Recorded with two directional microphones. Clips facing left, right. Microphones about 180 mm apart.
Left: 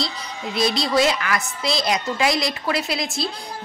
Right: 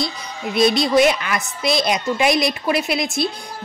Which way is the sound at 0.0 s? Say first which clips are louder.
Right 3 dB; 20° right (ahead or behind).